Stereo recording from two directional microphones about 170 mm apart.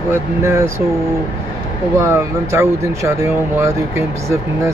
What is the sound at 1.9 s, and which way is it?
Speech, 15° right (ahead or behind).